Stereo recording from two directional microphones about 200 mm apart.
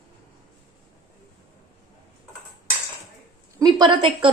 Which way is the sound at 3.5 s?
20° right (ahead or behind).